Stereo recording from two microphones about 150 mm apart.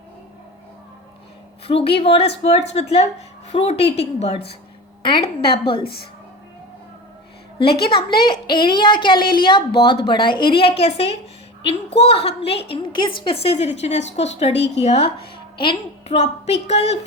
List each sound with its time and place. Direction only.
1.6 s a woman's voice: 40° left (ahead or behind)
5.5 s a woman's voice: 35° left (ahead or behind)
7.6 s a woman's voice: 35° left (ahead or behind)
15.5 s a child's voice: 30° left (ahead or behind)
16.1 s a woman's voice: 45° left (ahead or behind)